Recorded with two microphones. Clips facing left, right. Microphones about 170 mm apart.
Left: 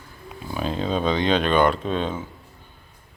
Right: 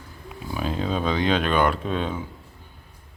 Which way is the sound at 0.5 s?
5° right (ahead or behind).